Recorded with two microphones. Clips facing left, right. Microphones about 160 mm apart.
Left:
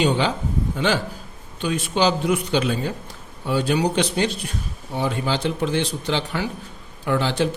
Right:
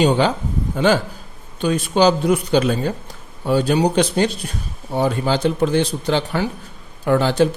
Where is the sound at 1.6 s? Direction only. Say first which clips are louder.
Right 5 dB; 45° right (ahead or behind).